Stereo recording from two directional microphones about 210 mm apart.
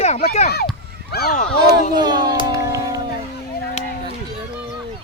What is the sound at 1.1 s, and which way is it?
Speech, 50° left (ahead or behind).